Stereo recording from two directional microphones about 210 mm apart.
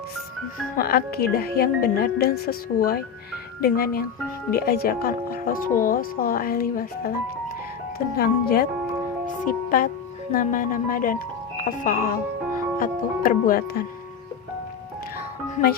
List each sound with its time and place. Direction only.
0.8 s speech: 45° left (ahead or behind)